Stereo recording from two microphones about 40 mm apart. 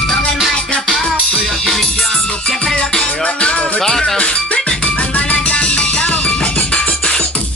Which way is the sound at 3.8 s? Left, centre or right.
Centre.